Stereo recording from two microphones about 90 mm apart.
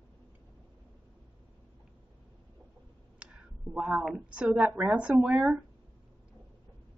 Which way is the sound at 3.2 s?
15° right (ahead or behind).